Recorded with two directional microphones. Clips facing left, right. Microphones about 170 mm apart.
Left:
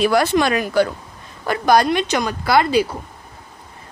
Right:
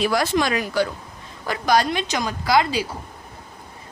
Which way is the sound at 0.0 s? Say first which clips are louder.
Left 4 dB; 60° left (ahead or behind).